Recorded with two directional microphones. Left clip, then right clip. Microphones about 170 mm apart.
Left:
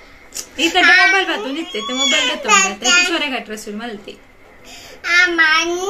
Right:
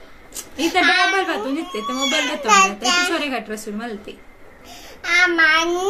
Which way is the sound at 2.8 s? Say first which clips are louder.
Left 5 dB; 20° right (ahead or behind).